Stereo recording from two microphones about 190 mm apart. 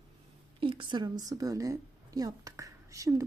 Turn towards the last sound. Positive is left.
turn(degrees=-15)  # may be behind; listen again after turning